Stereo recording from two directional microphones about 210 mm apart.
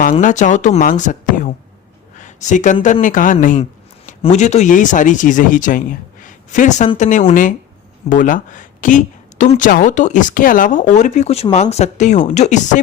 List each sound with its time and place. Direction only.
0.0 s speech: 35° left (ahead or behind)